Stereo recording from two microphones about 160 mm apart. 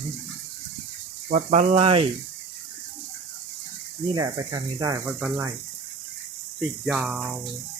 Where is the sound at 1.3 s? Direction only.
50° right (ahead or behind).